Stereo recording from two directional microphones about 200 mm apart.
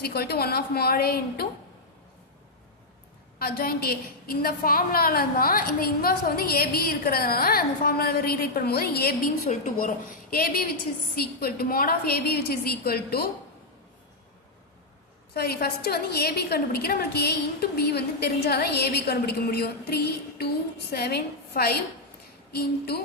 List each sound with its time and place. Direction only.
0.0 s a woman's voice: 50° left (ahead or behind)
3.3 s a woman's voice: 50° left (ahead or behind)
9.5 s a woman's voice: 40° left (ahead or behind)
15.3 s a woman's voice: 50° left (ahead or behind)